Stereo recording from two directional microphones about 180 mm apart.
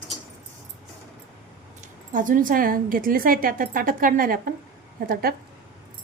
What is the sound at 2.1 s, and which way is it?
A woman's voice, 50° right (ahead or behind).